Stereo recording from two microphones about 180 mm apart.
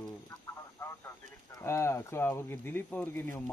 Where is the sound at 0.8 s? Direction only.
15° left (ahead or behind).